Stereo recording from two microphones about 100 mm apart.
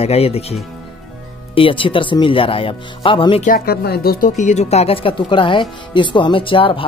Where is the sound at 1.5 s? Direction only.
60° left (ahead or behind).